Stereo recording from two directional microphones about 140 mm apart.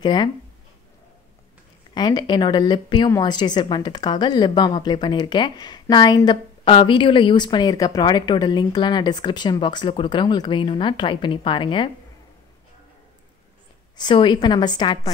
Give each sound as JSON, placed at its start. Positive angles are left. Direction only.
{"t": 0.0, "sound": "a woman's voice", "side_deg": 30}
{"t": 2.0, "sound": "a woman's voice", "side_deg": 30}
{"t": 13.9, "sound": "a woman's voice", "side_deg": 35}